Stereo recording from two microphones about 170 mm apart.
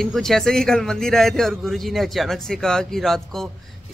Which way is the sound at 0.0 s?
Centre (ahead or behind).